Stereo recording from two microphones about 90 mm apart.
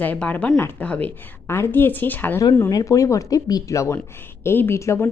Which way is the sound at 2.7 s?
40° left (ahead or behind).